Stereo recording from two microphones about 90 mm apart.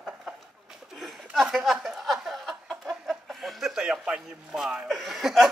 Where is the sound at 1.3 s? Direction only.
5° right (ahead or behind).